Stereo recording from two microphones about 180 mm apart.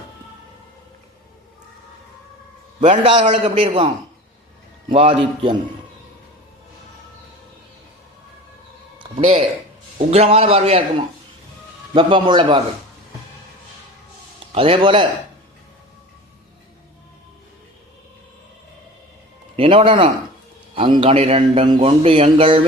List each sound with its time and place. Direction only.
2.8 s speech: 30° right (ahead or behind)
3.4 s a man's voice: 30° right (ahead or behind)
5.2 s a man's voice: 30° right (ahead or behind)
9.0 s a sound: 25° right (ahead or behind)
10.0 s a man's voice: 35° right (ahead or behind)
14.5 s a man's voice: 30° right (ahead or behind)
19.5 s speech: 30° right (ahead or behind)